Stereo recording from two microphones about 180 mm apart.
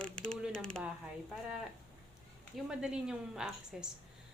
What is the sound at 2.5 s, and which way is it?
A woman's voice, 5° right (ahead or behind).